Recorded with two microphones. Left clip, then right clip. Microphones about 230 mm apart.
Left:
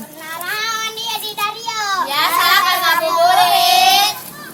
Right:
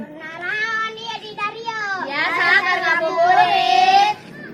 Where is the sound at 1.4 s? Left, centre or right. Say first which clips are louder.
Left 2 dB; centre.